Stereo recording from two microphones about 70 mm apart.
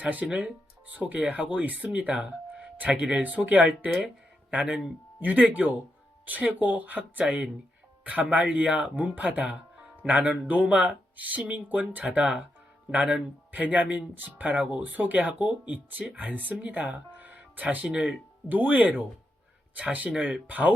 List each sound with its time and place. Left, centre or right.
0.0 s speech: right
20.1 s speech: centre